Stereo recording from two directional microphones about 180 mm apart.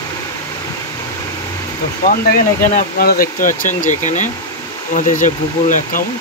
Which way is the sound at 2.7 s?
55° left (ahead or behind).